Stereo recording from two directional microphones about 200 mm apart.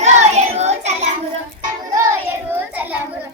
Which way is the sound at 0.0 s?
35° right (ahead or behind).